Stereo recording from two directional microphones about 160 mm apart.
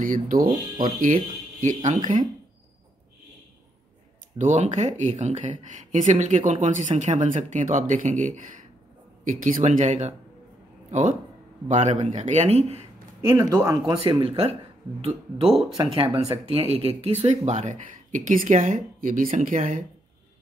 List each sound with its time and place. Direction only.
0.0 s speech: 60° right (ahead or behind)
4.4 s speech: 50° right (ahead or behind)
13.3 s speech: 15° right (ahead or behind)
13.8 s speech: 30° right (ahead or behind); by 19.8 s 55° right (ahead or behind)